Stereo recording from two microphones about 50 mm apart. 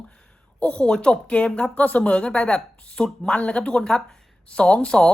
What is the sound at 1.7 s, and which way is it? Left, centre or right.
A woman's voice, left.